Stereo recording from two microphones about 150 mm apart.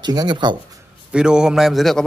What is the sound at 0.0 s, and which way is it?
Speech, 30° right (ahead or behind).